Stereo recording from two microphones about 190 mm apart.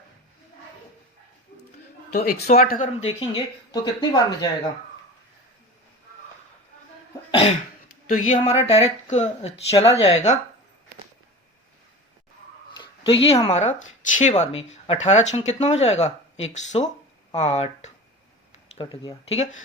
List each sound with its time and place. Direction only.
2.1 s speech: 55° left (ahead or behind); by 4.4 s 20° left (ahead or behind)
7.3 s cough: 30° left (ahead or behind)
8.3 s speech: 35° left (ahead or behind)
12.7 s dog: 25° left (ahead or behind)
13.5 s speech: 35° left (ahead or behind)